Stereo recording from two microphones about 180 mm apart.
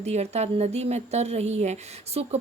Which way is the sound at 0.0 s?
35° right (ahead or behind).